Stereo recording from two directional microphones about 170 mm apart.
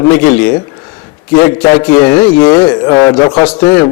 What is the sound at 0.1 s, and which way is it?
A man's voice, 15° left (ahead or behind).